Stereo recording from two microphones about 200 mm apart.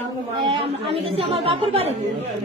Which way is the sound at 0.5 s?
30° right (ahead or behind).